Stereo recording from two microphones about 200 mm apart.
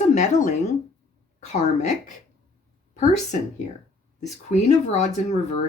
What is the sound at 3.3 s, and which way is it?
Speech, 40° left (ahead or behind).